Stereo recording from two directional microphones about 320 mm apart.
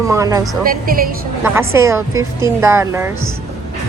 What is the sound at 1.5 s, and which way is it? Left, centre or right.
Speech, centre.